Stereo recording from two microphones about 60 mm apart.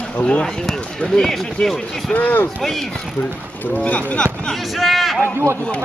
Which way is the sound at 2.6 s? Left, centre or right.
Centre.